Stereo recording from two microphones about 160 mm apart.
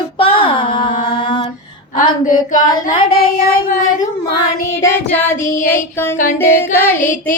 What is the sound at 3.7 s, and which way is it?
Child singing, 55° left (ahead or behind).